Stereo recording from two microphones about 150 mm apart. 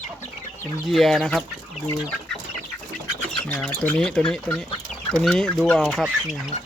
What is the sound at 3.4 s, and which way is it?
Speech, 10° left (ahead or behind).